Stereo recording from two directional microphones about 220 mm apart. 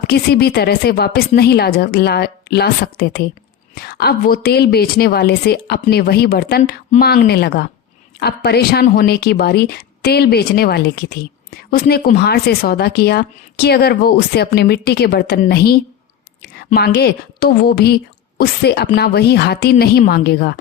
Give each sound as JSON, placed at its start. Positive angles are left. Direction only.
{"t": 0.1, "sound": "a woman's voice", "side_deg": 45}